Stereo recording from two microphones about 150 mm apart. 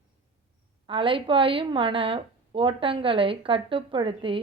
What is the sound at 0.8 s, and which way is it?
Speech, 35° right (ahead or behind).